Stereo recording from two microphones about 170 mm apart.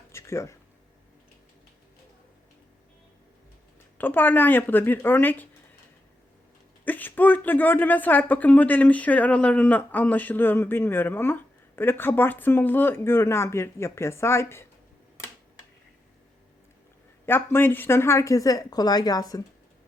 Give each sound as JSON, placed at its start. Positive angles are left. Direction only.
{"t": 0.1, "sound": "a sound", "side_deg": 15}
{"t": 3.9, "sound": "speech", "side_deg": 10}
{"t": 6.8, "sound": "speech", "side_deg": 10}
{"t": 17.2, "sound": "speech", "side_deg": 15}